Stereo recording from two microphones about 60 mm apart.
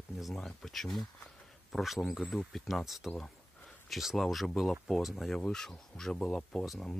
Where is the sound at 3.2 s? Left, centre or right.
Centre.